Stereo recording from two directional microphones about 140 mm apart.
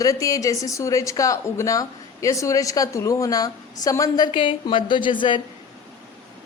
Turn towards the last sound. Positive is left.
turn(degrees=35)  # may be behind; listen again after turning